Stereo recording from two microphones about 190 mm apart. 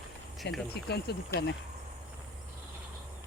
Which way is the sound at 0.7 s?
60° left (ahead or behind).